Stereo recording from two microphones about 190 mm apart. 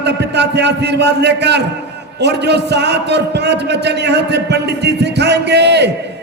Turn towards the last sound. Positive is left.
turn(degrees=-65)  # may be behind; listen again after turning